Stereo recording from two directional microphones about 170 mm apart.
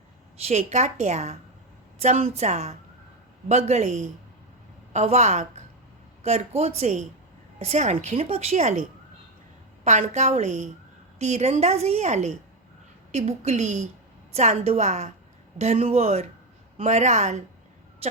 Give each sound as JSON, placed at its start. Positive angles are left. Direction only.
{"t": 0.3, "sound": "a woman's voice", "side_deg": -40}
{"t": 9.8, "sound": "a woman's voice", "side_deg": -45}